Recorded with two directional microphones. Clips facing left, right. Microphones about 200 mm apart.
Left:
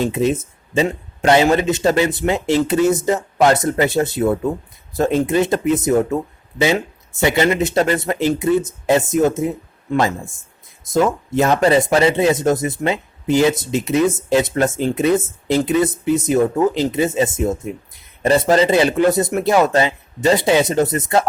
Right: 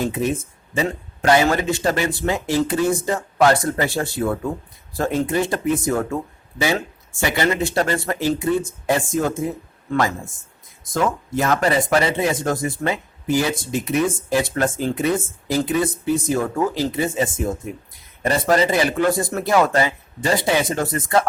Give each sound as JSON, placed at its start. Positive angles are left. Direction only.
{"t": 0.0, "sound": "speech", "side_deg": 25}
{"t": 11.3, "sound": "speech", "side_deg": 25}